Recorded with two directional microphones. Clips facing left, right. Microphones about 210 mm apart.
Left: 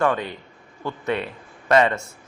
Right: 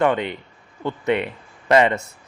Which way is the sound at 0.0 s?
20° right (ahead or behind).